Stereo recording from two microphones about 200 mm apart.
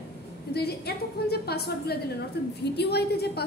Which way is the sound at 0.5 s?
50° left (ahead or behind).